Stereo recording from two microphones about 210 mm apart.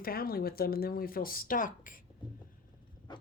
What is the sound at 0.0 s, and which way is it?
Speech, 45° left (ahead or behind).